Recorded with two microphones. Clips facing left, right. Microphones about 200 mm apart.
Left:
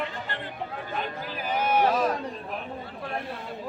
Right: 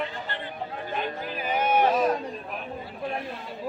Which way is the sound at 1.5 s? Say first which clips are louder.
Right 1 dB; 10° right (ahead or behind).